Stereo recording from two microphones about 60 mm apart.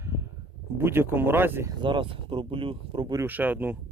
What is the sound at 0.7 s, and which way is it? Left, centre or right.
Speech, right.